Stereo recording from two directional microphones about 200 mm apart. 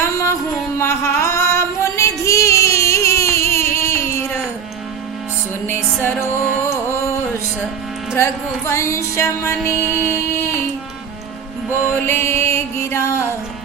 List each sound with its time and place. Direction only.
0.0 s music: 15° left (ahead or behind)
0.8 s singing: 10° left (ahead or behind)
2.2 s a sound: 15° left (ahead or behind)
5.6 s music: 10° left (ahead or behind)
8.1 s music: 10° left (ahead or behind)
11.9 s music: 10° left (ahead or behind)